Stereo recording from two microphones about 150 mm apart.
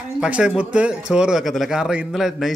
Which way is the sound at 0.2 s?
5° right (ahead or behind).